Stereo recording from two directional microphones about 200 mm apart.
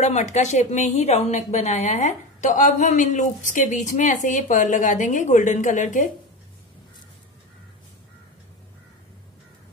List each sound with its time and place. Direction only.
0.0 s a woman's voice: 35° left (ahead or behind)